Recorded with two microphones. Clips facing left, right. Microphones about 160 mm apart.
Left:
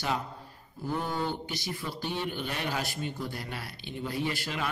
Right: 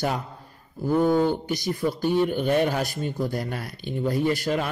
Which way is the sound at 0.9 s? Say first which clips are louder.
Right 12 dB; 45° right (ahead or behind).